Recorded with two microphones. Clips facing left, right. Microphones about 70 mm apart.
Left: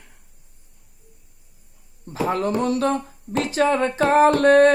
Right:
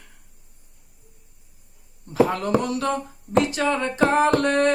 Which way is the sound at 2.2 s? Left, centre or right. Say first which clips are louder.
Even; left.